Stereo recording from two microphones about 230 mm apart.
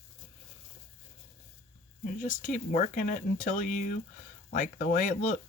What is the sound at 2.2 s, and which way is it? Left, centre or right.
Speech, left.